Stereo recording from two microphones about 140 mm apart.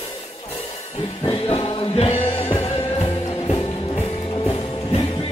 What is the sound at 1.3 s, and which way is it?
Music, 45° left (ahead or behind).